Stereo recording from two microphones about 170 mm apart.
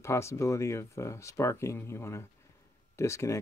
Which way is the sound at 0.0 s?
15° left (ahead or behind).